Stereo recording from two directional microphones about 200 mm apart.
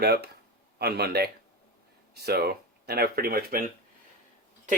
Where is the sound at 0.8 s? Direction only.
55° right (ahead or behind).